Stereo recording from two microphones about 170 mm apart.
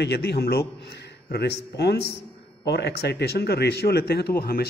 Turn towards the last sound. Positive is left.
turn(degrees=65)  # may be behind; listen again after turning